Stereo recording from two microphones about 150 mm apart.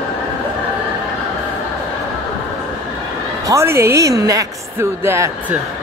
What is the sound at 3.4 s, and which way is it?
A woman's voice, 20° right (ahead or behind).